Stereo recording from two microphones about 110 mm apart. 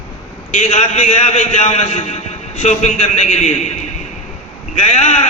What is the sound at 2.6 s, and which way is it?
A man's voice, 90° left.